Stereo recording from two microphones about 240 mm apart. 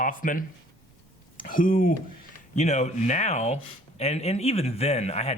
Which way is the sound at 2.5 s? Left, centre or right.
Left.